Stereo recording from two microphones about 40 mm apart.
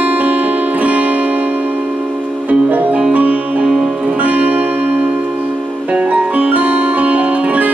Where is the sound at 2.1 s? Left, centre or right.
Centre.